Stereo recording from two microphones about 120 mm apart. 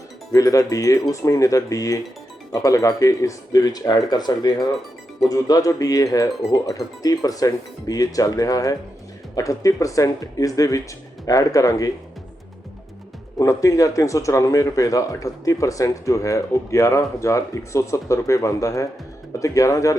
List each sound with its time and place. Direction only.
0.3 s speech: 30° left (ahead or behind)
13.4 s speech: 25° left (ahead or behind)